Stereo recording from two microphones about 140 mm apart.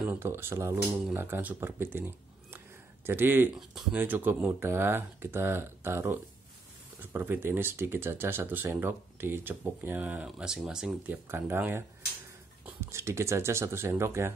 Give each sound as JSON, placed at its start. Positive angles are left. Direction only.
{"t": 0.0, "sound": "speech", "side_deg": -15}
{"t": 3.5, "sound": "speech", "side_deg": -5}
{"t": 11.2, "sound": "speech", "side_deg": -15}